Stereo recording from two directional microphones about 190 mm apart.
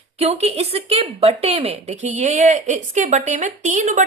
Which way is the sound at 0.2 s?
35° right (ahead or behind).